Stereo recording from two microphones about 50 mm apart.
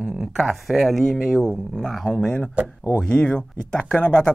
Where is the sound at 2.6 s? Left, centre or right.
Right.